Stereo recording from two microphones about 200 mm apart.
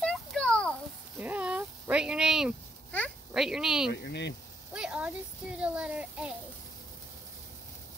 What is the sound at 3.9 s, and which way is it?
Speech, 60° left (ahead or behind).